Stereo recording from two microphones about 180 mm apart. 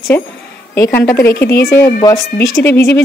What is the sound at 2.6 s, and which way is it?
Speech, 15° left (ahead or behind).